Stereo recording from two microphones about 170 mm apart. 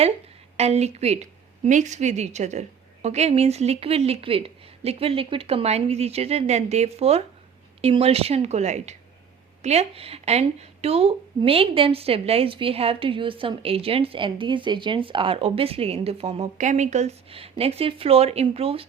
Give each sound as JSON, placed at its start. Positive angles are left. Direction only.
{"t": 0.5, "sound": "a woman's voice", "side_deg": -40}